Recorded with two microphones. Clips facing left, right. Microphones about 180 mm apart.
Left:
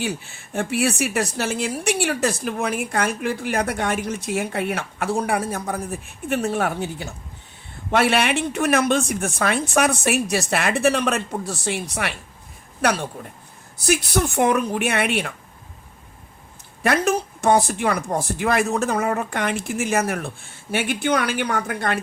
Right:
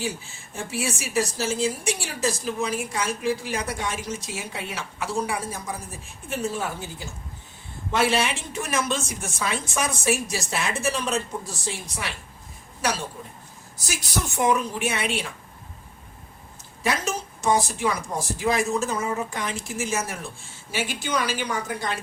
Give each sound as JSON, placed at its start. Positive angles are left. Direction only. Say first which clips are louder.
{"t": 0.0, "sound": "a woman's voice", "louder": "left 4 dB", "side_deg": 65}
{"t": 16.8, "sound": "a woman's voice", "louder": "left 7 dB", "side_deg": 60}